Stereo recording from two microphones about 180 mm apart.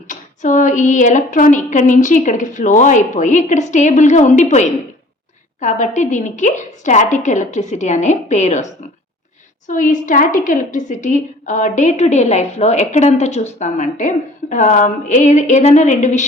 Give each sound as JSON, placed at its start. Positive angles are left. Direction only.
{"t": 0.1, "sound": "a woman's voice", "side_deg": 45}